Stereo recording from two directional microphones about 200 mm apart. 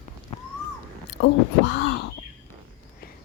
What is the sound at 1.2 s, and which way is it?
Speech, 60° left (ahead or behind).